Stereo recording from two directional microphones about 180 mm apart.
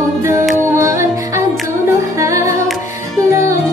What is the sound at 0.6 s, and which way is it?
Music, 15° right (ahead or behind).